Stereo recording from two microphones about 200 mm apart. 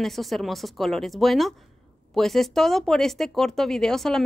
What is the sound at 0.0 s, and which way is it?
Speech, centre (ahead or behind).